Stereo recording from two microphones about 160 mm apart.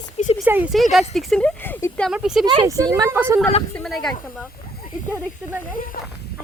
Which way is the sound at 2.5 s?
25° right (ahead or behind).